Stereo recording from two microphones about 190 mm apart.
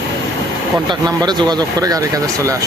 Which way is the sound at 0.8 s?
20° right (ahead or behind).